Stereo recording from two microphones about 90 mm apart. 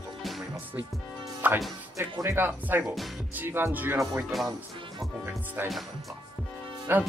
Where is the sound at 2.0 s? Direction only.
25° right (ahead or behind).